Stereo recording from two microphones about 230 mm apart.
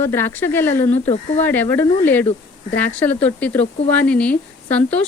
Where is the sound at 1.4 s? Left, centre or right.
Centre.